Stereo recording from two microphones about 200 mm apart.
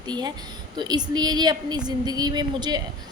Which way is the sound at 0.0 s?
20° right (ahead or behind).